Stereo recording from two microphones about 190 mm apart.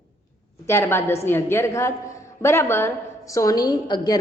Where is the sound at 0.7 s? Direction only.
15° left (ahead or behind).